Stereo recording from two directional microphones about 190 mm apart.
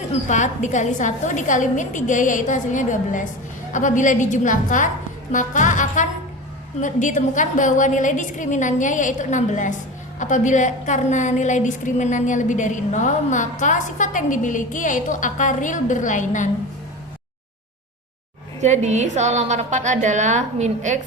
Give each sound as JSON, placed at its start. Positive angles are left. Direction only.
{"t": 0.3, "sound": "a woman's voice", "side_deg": 40}
{"t": 18.6, "sound": "a woman's voice", "side_deg": -35}